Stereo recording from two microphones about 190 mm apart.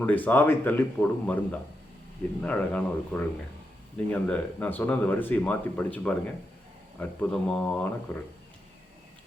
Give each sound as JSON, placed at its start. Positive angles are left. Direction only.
{"t": 0.0, "sound": "speech", "side_deg": 10}